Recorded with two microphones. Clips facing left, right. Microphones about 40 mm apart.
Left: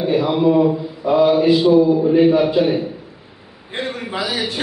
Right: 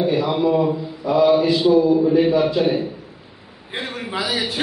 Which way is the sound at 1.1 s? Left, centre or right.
Left.